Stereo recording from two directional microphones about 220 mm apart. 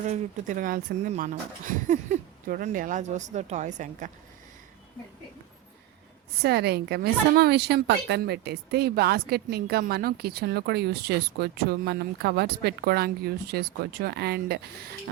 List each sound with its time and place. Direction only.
0.1 s speech: 35° right (ahead or behind)
6.4 s speech: 45° right (ahead or behind)